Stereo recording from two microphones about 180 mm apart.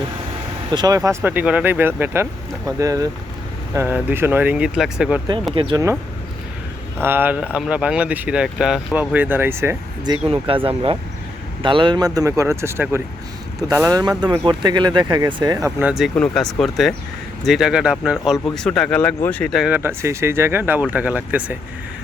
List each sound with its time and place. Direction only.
0.7 s speech: 20° right (ahead or behind); by 5.2 s 5° right (ahead or behind)
5.5 s speech: 30° right (ahead or behind)
7.0 s speech: 10° right (ahead or behind)
10.2 s speech: 30° right (ahead or behind)
15.9 s speech: centre (ahead or behind)